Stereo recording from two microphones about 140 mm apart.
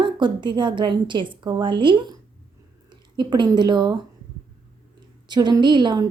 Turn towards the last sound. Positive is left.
turn(degrees=-30)  # may be behind; listen again after turning